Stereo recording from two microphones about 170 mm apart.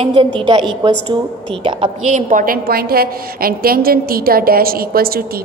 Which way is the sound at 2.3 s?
55° right (ahead or behind).